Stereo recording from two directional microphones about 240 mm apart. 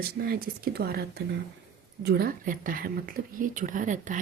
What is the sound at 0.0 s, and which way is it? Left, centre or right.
A woman's voice, right.